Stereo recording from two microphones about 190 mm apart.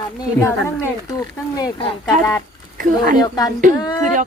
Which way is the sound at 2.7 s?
50° right (ahead or behind).